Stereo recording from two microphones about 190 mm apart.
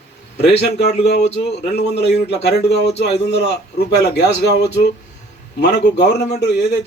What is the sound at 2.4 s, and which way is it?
A man's voice, 60° left (ahead or behind).